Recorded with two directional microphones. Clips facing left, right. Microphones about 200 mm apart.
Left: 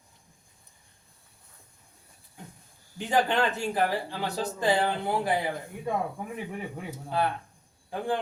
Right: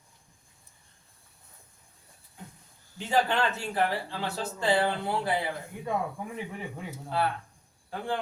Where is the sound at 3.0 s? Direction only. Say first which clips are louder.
Left 1 dB; 15° left (ahead or behind).